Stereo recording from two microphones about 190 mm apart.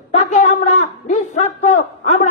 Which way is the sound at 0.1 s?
35° left (ahead or behind).